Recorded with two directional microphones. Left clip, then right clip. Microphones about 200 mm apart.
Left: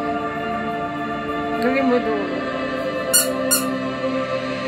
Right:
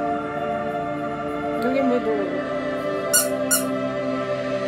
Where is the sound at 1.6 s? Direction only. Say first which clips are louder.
Left 2 dB; 15° right (ahead or behind).